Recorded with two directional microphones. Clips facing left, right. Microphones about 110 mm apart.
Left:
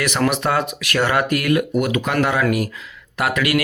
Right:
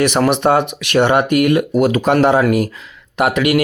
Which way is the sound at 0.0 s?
25° right (ahead or behind).